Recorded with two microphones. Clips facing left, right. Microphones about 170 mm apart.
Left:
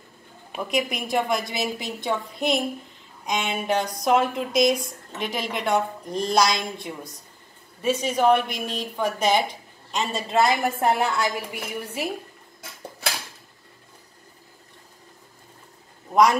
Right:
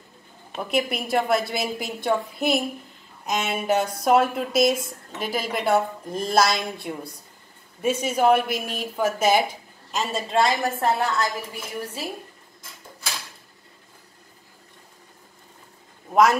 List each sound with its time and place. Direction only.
0.6 s a woman's voice: centre (ahead or behind); by 12.1 s 15° left (ahead or behind)
16.1 s a man's voice: 5° right (ahead or behind)